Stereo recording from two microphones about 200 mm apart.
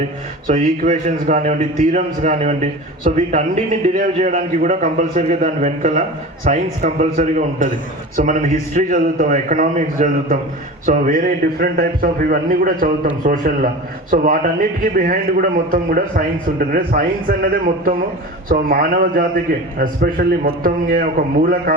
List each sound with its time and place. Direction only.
0.4 s a man's voice: 40° right (ahead or behind)